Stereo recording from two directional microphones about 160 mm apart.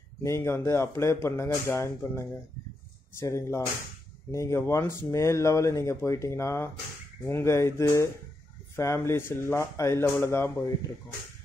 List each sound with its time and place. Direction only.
0.2 s speech: 15° left (ahead or behind)